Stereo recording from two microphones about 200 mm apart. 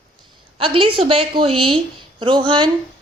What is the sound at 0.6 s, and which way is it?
A woman's voice, 25° right (ahead or behind).